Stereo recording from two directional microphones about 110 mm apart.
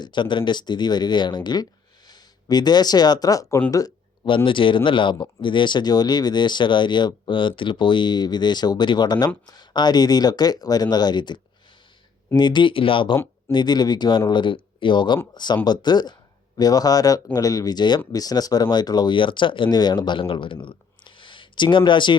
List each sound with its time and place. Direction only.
0.0 s speech: 45° left (ahead or behind)
3.7 s a sound: 30° left (ahead or behind)
4.4 s speech: 50° left (ahead or behind)
12.4 s speech: 45° left (ahead or behind)
13.5 s speech: 40° left (ahead or behind)